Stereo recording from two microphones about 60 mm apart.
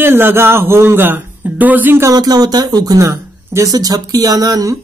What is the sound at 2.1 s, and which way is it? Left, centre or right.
Speech, right.